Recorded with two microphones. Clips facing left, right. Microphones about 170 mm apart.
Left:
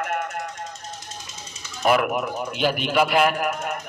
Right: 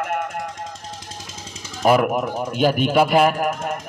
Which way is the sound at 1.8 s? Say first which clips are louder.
Right 3 dB; 35° right (ahead or behind).